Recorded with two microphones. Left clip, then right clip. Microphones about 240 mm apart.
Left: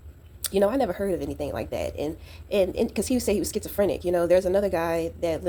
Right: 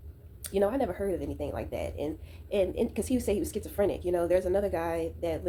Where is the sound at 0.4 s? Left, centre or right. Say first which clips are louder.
Left 5 dB; left.